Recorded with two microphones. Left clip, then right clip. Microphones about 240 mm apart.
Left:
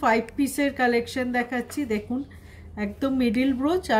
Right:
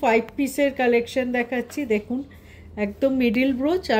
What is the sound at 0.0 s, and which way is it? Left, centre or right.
Speech, left.